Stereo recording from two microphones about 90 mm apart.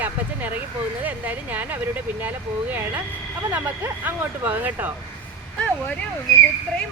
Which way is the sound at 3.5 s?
20° right (ahead or behind).